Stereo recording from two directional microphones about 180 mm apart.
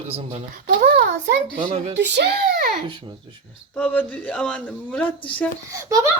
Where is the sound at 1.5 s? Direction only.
35° right (ahead or behind).